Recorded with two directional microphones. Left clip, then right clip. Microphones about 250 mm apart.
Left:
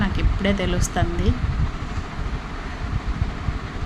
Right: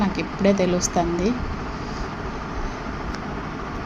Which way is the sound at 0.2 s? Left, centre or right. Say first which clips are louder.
Right 7 dB; centre.